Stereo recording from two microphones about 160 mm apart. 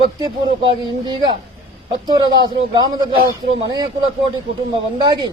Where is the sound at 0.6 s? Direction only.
30° right (ahead or behind).